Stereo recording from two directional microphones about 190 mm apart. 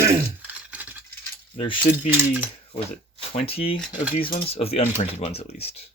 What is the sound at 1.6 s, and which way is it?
Speech, 25° left (ahead or behind).